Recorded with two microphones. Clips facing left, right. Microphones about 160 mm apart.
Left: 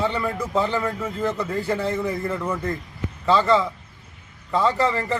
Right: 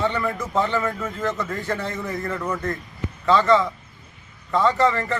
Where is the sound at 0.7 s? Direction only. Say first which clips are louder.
Even; 10° left (ahead or behind).